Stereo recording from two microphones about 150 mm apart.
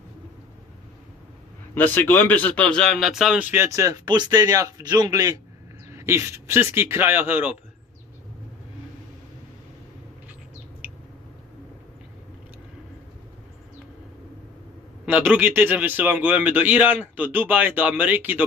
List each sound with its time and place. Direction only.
1.7 s speech: 15° left (ahead or behind); by 7.5 s 10° right (ahead or behind)
15.0 s speech: 10° right (ahead or behind)